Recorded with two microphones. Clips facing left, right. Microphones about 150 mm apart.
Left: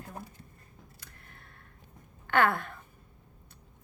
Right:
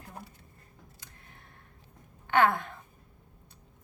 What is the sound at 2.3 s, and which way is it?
Speech, 20° right (ahead or behind).